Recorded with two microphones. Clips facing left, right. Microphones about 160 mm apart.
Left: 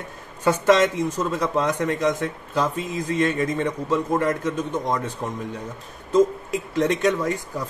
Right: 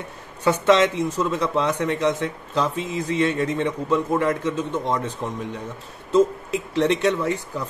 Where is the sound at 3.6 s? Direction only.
10° left (ahead or behind).